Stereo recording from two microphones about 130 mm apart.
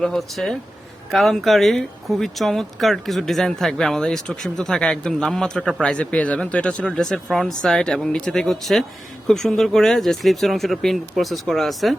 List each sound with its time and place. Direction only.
0.0 s speech: centre (ahead or behind)